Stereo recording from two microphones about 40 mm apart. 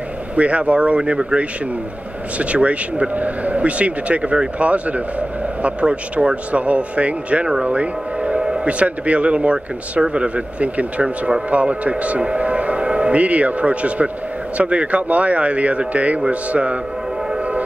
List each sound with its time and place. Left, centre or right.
0.4 s speech: right
7.6 s a sound: right
8.6 s speech: right